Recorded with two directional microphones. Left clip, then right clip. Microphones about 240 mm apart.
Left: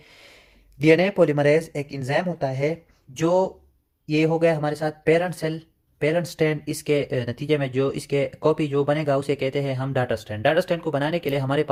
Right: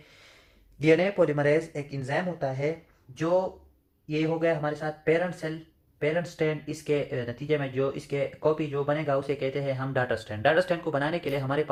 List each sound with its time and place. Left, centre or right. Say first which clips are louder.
0.8 s speech: left 5 dB; left
4.0 s speech: left 7 dB; left